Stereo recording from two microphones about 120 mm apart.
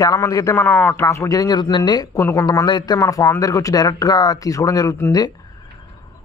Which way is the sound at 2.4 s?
35° left (ahead or behind).